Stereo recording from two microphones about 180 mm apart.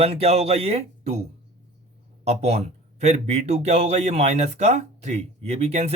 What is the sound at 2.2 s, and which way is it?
Speech, 40° right (ahead or behind).